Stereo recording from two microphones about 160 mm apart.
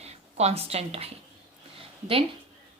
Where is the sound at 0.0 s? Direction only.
40° right (ahead or behind).